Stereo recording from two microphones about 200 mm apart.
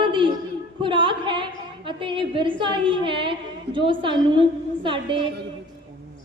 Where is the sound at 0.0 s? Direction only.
25° right (ahead or behind).